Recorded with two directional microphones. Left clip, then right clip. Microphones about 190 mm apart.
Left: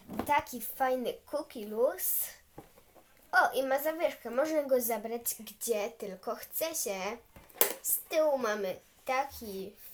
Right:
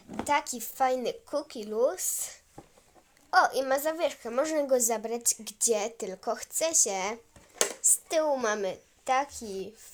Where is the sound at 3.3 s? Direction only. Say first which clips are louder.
Right 3 dB; 45° right (ahead or behind).